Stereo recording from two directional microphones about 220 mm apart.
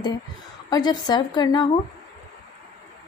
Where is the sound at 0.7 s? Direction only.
20° left (ahead or behind).